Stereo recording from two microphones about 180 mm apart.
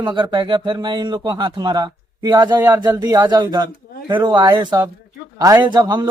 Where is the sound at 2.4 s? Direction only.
10° right (ahead or behind).